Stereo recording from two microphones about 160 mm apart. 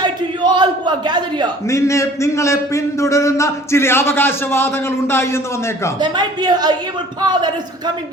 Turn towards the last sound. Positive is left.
turn(degrees=-25)  # may be behind; listen again after turning